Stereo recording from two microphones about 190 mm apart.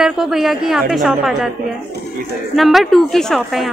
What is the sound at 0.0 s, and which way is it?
A woman's voice, centre (ahead or behind).